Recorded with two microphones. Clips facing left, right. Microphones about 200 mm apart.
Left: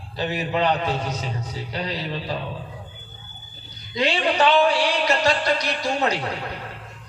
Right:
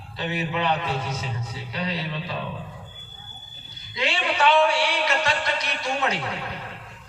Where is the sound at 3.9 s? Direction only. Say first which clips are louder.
Left 5 dB; 35° left (ahead or behind).